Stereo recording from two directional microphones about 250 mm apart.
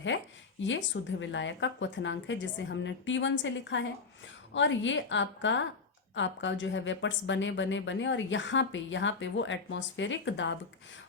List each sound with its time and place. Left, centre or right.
0.6 s a woman's voice: left